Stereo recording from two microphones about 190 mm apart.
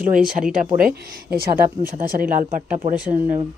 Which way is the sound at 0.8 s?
50° right (ahead or behind).